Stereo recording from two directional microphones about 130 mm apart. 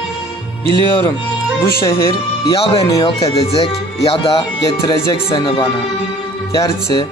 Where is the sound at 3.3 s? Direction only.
45° left (ahead or behind).